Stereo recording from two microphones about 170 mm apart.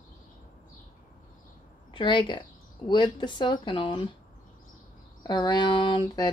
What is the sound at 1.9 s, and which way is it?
Speech, 30° left (ahead or behind).